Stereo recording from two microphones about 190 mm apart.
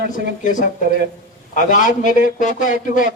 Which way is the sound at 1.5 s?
45° left (ahead or behind).